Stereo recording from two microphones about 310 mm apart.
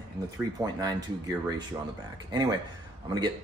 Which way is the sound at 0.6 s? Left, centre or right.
Centre.